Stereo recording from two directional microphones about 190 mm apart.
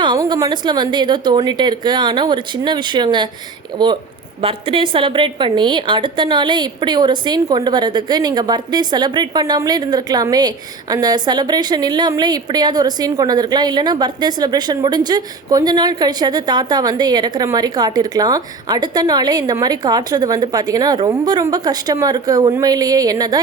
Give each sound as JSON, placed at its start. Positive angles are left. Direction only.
{"t": 0.0, "sound": "a woman's voice", "side_deg": -25}
{"t": 4.4, "sound": "a woman's voice", "side_deg": -30}